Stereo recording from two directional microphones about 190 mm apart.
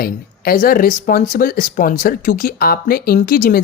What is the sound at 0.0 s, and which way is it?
Speech, 50° left (ahead or behind).